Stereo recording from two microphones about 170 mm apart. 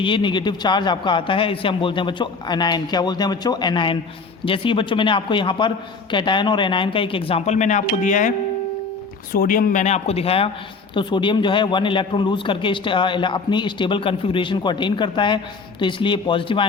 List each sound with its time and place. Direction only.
0.0 s speech: 30° left (ahead or behind); by 8.3 s 50° left (ahead or behind)
9.3 s speech: 55° left (ahead or behind); by 16.6 s 30° left (ahead or behind)